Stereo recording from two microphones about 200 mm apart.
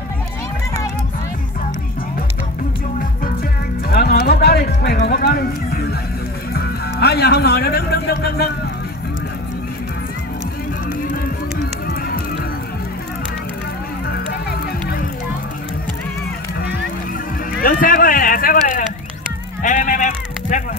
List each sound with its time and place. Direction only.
3.9 s music: 50° left (ahead or behind)
17.6 s run: 45° left (ahead or behind)
19.6 s sheep: 40° left (ahead or behind)